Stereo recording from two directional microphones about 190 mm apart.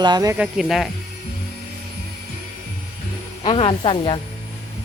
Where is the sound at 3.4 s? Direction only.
30° left (ahead or behind).